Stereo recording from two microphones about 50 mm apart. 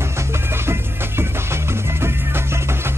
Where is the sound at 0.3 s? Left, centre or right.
Right.